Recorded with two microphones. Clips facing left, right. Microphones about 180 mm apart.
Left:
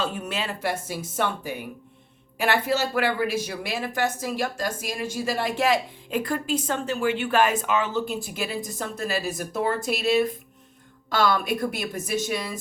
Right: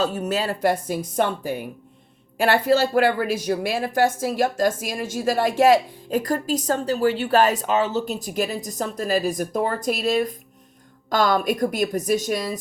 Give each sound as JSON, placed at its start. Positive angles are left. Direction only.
{"t": 0.0, "sound": "a woman's voice", "side_deg": -40}